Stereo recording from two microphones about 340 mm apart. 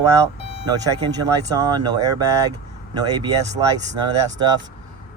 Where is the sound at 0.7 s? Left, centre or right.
Centre.